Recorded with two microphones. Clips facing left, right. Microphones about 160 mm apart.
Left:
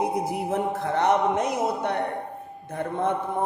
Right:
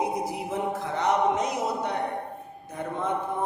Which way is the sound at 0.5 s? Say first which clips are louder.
Left 4 dB; 60° left (ahead or behind).